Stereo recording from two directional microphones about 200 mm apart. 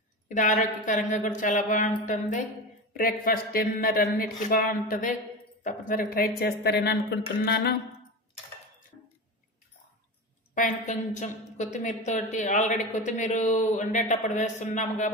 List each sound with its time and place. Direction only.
0.3 s a woman's voice: 40° left (ahead or behind)
2.9 s speech: 45° left (ahead or behind)
10.5 s a woman's voice: 40° left (ahead or behind)